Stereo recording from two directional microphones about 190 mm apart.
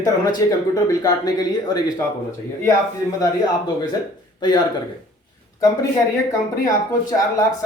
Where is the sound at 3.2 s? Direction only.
20° left (ahead or behind).